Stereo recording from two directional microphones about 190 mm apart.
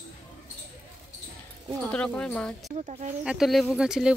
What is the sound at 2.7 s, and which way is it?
Speech, 35° right (ahead or behind).